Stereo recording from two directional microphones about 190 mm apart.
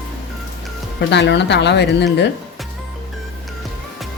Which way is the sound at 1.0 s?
65° left (ahead or behind).